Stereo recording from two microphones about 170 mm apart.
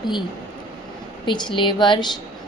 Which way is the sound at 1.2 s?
25° left (ahead or behind).